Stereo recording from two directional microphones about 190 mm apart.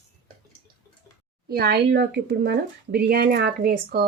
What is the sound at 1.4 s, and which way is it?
Speech, 55° right (ahead or behind).